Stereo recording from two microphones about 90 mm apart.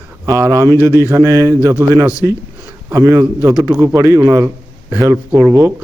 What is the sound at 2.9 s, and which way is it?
A man's voice, 40° right (ahead or behind).